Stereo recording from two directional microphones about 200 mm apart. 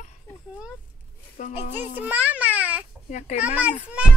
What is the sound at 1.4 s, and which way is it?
Speech, 40° left (ahead or behind).